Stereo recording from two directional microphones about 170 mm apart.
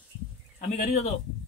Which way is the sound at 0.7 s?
40° left (ahead or behind).